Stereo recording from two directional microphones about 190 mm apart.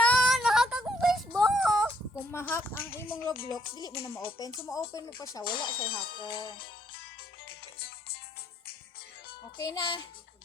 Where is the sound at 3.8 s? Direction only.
30° left (ahead or behind).